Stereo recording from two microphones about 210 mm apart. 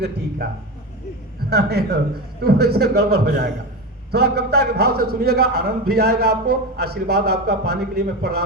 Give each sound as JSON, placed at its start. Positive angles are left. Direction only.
{"t": 1.5, "sound": "a man's voice", "side_deg": -50}